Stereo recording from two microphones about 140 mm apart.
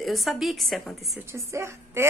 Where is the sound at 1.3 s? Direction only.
20° right (ahead or behind).